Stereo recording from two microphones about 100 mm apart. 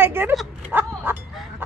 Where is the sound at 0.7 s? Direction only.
20° right (ahead or behind).